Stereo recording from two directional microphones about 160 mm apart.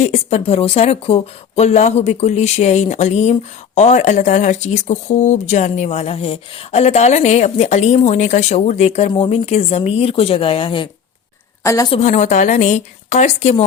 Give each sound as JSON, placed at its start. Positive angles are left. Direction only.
{"t": 0.0, "sound": "speech", "side_deg": 45}
{"t": 11.6, "sound": "a woman's voice", "side_deg": 20}
{"t": 11.9, "sound": "speech", "side_deg": 45}